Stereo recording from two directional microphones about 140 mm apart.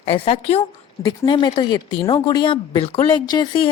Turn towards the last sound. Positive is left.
turn(degrees=30)  # may be behind; listen again after turning